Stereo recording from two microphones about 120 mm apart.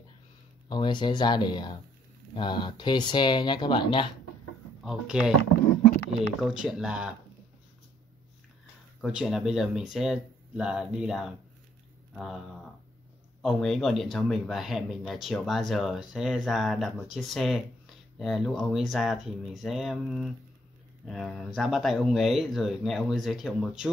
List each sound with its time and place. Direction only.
0.7 s speech: 40° left (ahead or behind)
4.8 s speech: 5° right (ahead or behind)
6.4 s speech: 5° right (ahead or behind)
9.0 s speech: 5° right (ahead or behind)